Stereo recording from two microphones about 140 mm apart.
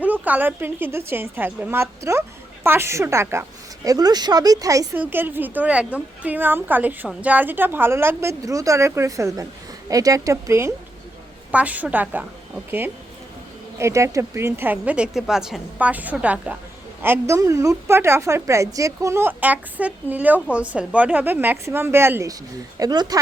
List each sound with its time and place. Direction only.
0.0 s a woman's voice: 10° right (ahead or behind)
4.9 s a woman's voice: 15° right (ahead or behind)
11.5 s a woman's voice: 10° right (ahead or behind)
13.7 s a woman's voice: 20° right (ahead or behind)